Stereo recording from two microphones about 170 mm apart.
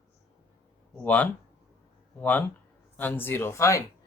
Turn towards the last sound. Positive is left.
turn(degrees=15)  # may be behind; listen again after turning